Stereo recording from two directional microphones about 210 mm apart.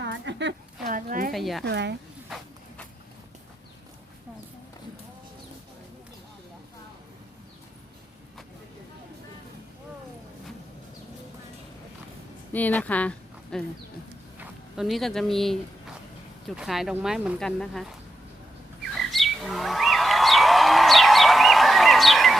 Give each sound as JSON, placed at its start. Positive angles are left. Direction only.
{"t": 0.0, "sound": "a sound", "side_deg": -55}
{"t": 0.9, "sound": "a sound", "side_deg": -40}
{"t": 1.3, "sound": "speech", "side_deg": 0}
{"t": 1.6, "sound": "a woman's voice", "side_deg": -55}
{"t": 12.5, "sound": "speech", "side_deg": 5}
{"t": 18.9, "sound": "chirp", "side_deg": 0}